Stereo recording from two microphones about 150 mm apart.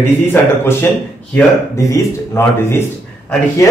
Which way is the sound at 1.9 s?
15° left (ahead or behind).